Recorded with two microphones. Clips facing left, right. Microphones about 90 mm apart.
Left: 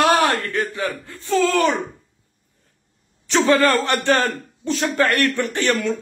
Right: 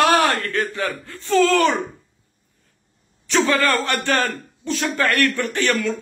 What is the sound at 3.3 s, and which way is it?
A man's voice, 25° left (ahead or behind).